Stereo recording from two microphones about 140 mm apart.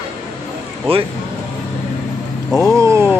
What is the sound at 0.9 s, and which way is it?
Speech, 45° right (ahead or behind).